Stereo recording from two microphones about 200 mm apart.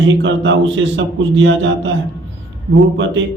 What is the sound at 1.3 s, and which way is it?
Mantra, 65° right (ahead or behind).